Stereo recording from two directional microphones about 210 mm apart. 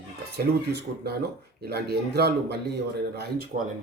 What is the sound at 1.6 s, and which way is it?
Speech, 50° right (ahead or behind).